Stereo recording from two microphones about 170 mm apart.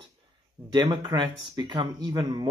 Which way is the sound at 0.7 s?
25° right (ahead or behind).